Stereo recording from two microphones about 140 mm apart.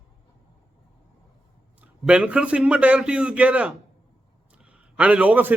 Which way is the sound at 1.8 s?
10° right (ahead or behind).